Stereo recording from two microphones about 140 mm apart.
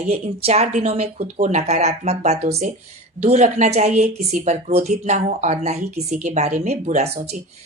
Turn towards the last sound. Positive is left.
turn(degrees=-55)  # may be behind; listen again after turning